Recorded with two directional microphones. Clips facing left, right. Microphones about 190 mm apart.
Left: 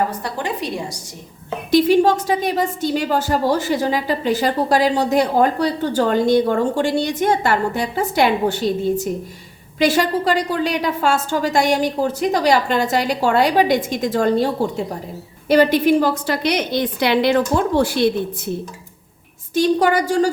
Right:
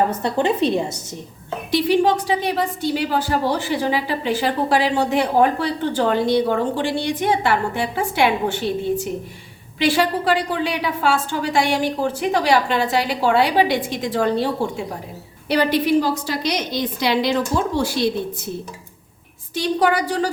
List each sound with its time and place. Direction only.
0.1 s a woman's voice: 25° right (ahead or behind)
1.7 s a woman's voice: 45° left (ahead or behind)
19.5 s a woman's voice: 45° left (ahead or behind)